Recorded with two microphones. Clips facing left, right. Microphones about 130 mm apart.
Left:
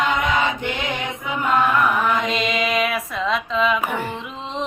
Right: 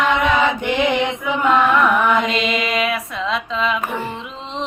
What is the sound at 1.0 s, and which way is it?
Mantra, 90° right.